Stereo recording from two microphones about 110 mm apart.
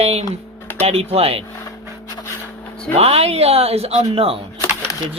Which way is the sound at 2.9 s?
65° right (ahead or behind).